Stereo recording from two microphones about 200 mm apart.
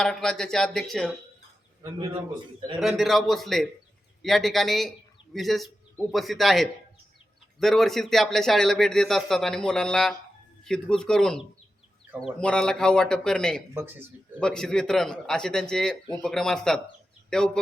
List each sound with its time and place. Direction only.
0.0 s a man's voice: 5° left (ahead or behind)
1.8 s a man's voice: 25° right (ahead or behind)
2.8 s a man's voice: centre (ahead or behind)
12.4 s a man's voice: 5° left (ahead or behind)